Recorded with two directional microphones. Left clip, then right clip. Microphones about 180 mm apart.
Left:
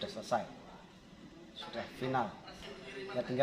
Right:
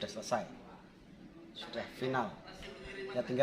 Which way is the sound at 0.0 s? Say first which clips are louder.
Left 1 dB; 5° right (ahead or behind).